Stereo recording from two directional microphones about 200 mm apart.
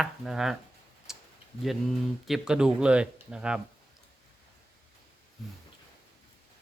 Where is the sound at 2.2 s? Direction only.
5° right (ahead or behind).